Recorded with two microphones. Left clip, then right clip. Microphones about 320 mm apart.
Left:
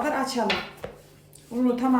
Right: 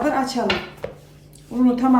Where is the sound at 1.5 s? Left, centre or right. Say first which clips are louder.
Right 5 dB; centre.